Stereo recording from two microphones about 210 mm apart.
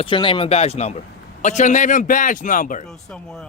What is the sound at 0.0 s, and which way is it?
Speech, 25° left (ahead or behind).